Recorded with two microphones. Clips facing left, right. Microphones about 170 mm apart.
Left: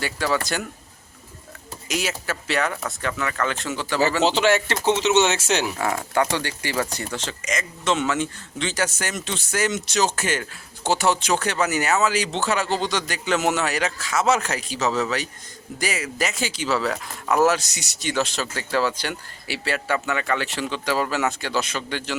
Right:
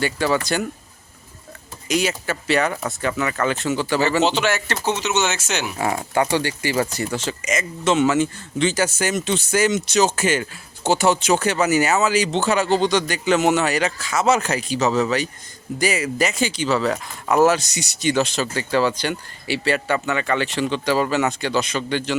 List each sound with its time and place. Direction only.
0.0 s speech: centre (ahead or behind)
1.9 s speech: 5° left (ahead or behind)
4.3 s speech: 30° left (ahead or behind)
5.8 s speech: 15° right (ahead or behind); by 22.2 s 5° left (ahead or behind)